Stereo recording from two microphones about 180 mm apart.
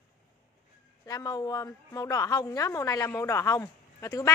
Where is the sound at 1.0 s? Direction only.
20° left (ahead or behind).